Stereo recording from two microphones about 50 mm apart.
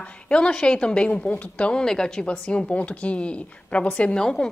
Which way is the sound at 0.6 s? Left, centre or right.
Left.